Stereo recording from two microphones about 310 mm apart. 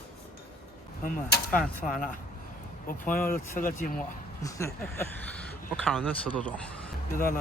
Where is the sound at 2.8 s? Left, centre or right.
Left.